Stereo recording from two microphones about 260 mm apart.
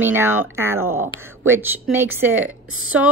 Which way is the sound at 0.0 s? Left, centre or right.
Centre.